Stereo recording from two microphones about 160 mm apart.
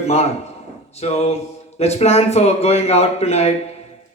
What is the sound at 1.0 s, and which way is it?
A man's voice, 40° left (ahead or behind).